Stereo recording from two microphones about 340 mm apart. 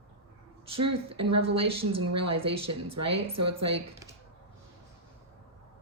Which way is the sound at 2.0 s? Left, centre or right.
Right.